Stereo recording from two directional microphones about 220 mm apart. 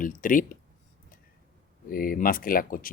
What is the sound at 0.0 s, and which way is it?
Speech, 40° left (ahead or behind).